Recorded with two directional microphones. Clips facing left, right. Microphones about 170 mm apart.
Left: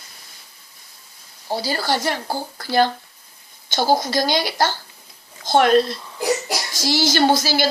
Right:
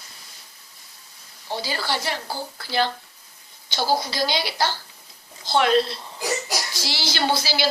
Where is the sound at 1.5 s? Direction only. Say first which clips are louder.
Left 5 dB; 40° left (ahead or behind).